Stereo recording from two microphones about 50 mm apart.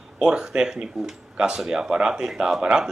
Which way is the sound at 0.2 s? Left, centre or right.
Centre.